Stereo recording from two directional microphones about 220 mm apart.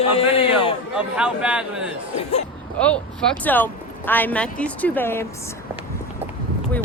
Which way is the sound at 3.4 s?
10° left (ahead or behind).